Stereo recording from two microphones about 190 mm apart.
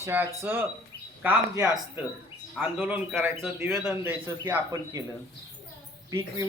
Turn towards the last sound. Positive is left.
turn(degrees=-20)  # may be behind; listen again after turning